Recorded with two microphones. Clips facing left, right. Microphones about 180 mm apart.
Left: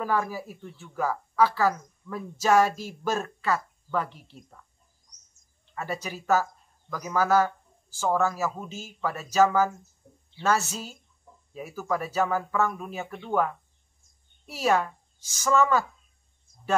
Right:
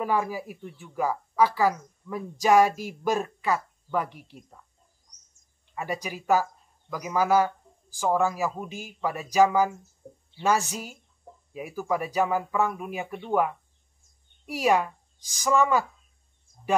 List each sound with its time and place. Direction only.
0.0 s speech: 15° right (ahead or behind)
5.8 s speech: 15° right (ahead or behind)
10.0 s a sound: 35° right (ahead or behind)
10.4 s a woman's voice: 15° right (ahead or behind)